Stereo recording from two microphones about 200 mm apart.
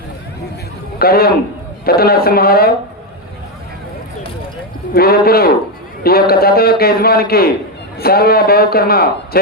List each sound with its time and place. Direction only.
0.9 s a man's voice: 50° left (ahead or behind)
4.9 s a man's voice: 50° left (ahead or behind)